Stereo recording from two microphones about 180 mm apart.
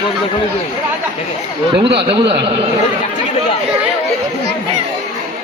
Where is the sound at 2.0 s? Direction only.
30° right (ahead or behind).